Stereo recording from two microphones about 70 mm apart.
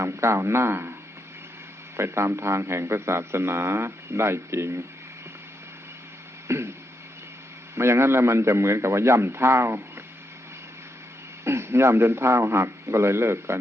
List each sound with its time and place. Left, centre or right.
0.0 s a man's voice: right
2.0 s a man's voice: right
6.5 s a man's voice: right
7.8 s a man's voice: right
11.4 s a man's voice: right